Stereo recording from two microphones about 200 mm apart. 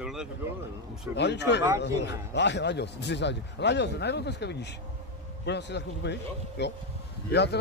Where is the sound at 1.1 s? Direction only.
60° left (ahead or behind).